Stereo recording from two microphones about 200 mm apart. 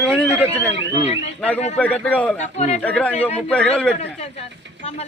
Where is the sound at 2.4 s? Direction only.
35° left (ahead or behind).